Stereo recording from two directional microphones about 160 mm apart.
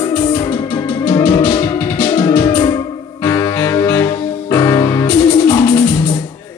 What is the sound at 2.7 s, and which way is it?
Saxophone, 20° left (ahead or behind).